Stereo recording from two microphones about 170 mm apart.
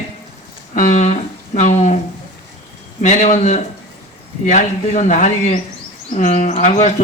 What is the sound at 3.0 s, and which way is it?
Speech, 45° left (ahead or behind).